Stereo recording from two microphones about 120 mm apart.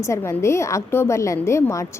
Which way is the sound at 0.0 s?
25° left (ahead or behind).